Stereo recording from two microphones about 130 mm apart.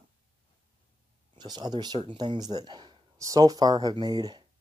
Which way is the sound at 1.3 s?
30° right (ahead or behind).